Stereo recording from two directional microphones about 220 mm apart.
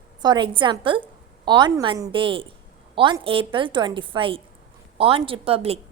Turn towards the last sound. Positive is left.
turn(degrees=-25)  # may be behind; listen again after turning